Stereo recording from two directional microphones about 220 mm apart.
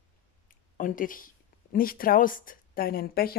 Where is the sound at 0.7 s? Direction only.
40° left (ahead or behind).